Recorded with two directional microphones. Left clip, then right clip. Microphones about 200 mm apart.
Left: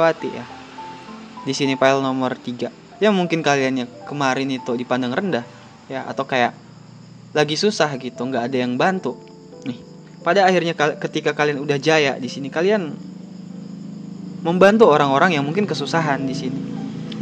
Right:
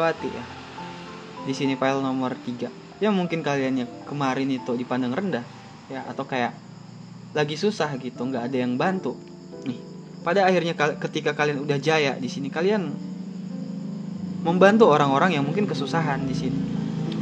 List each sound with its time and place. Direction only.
0.2 s speech: 20° left (ahead or behind)
1.5 s speech: 25° left (ahead or behind)
14.4 s speech: 15° left (ahead or behind)